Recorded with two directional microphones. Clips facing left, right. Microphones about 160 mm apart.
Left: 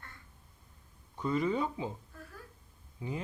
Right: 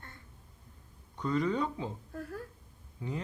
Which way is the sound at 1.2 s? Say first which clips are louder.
Even; 10° left (ahead or behind).